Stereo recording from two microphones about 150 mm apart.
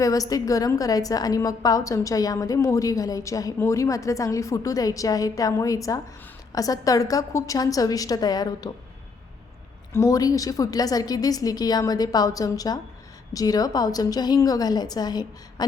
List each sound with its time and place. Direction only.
0.0 s a woman's voice: 25° left (ahead or behind)
9.9 s a woman's voice: 25° left (ahead or behind)